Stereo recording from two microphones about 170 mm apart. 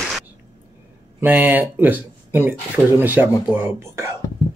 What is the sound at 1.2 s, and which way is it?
Speech, 10° right (ahead or behind).